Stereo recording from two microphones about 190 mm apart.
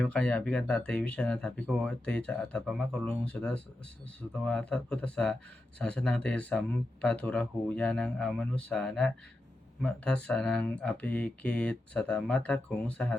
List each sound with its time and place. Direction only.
0.0 s speech: 5° left (ahead or behind)